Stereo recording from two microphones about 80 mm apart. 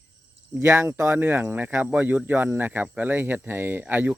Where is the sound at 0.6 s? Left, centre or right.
Right.